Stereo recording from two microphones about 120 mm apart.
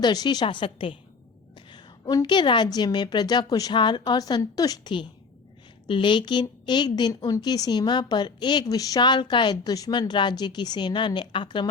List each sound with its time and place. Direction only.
0.0 s a woman's voice: 35° left (ahead or behind)
0.4 s a woman's voice: 50° left (ahead or behind)
1.5 s a woman's voice: 35° left (ahead or behind)